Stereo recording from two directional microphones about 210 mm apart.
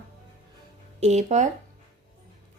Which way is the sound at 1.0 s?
35° right (ahead or behind).